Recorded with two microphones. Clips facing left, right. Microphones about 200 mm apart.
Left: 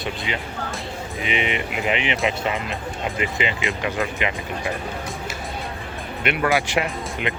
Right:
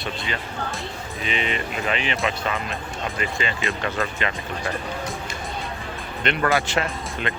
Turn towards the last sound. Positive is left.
turn(degrees=15)  # may be behind; listen again after turning